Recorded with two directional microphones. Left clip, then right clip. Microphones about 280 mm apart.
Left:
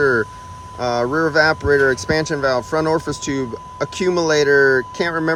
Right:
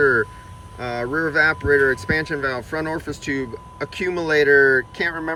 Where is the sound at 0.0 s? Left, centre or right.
Centre.